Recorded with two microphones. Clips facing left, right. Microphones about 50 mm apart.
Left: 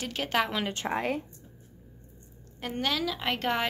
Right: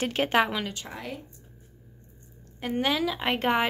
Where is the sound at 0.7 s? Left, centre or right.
Left.